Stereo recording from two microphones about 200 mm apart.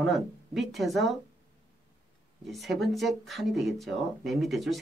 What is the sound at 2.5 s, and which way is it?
Speech, centre (ahead or behind).